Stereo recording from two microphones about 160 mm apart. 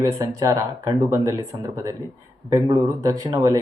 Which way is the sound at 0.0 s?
20° right (ahead or behind).